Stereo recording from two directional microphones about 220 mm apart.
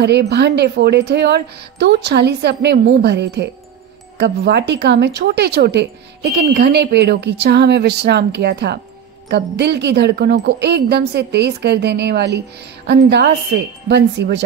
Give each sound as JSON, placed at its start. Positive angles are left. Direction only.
{"t": 0.0, "sound": "a woman's voice", "side_deg": -50}